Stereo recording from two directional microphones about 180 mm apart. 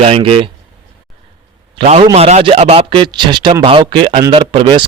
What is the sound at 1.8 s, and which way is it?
Speech, 35° right (ahead or behind).